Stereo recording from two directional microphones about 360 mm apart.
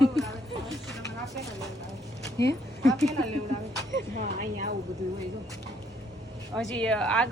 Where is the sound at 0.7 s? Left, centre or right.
Centre.